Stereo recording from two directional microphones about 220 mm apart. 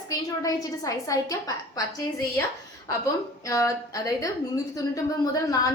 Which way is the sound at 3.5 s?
15° left (ahead or behind).